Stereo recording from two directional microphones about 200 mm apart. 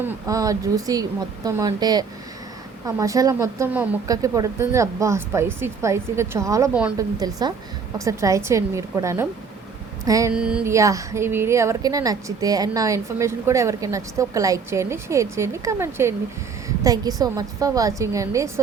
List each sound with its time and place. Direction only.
0.0 s speech: 15° right (ahead or behind)
10.3 s speech: 5° right (ahead or behind)